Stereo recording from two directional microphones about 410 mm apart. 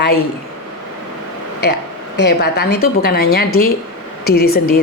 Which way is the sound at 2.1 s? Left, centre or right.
Left.